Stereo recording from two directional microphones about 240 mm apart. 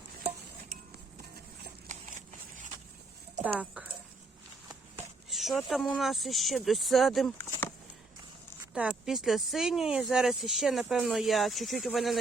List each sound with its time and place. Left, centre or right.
1.9 s a sound: right
3.5 s speech: centre
5.3 s speech: centre
8.7 s speech: centre